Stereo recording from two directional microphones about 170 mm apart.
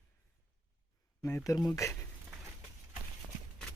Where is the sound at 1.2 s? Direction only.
10° left (ahead or behind).